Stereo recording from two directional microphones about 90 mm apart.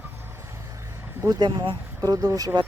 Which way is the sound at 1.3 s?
45° right (ahead or behind).